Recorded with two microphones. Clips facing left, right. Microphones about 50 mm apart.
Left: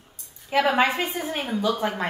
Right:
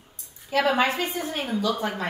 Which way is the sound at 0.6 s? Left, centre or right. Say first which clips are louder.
Left 1 dB; centre.